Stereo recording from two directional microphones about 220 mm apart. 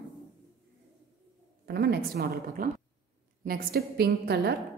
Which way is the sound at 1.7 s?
45° right (ahead or behind).